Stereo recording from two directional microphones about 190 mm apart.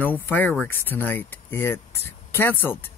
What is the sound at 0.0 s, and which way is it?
Speech, 10° left (ahead or behind).